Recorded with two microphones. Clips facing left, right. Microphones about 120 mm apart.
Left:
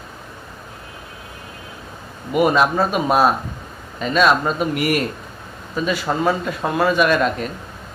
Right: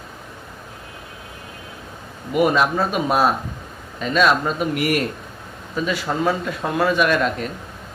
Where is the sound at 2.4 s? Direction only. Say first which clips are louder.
Left 2 dB; 35° left (ahead or behind).